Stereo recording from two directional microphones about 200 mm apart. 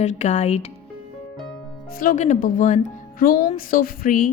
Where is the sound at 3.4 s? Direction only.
45° left (ahead or behind).